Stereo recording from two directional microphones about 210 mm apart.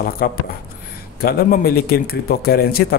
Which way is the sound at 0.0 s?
45° left (ahead or behind).